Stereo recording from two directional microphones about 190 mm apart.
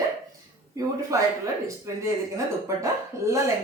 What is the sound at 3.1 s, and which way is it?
Speech, 15° right (ahead or behind).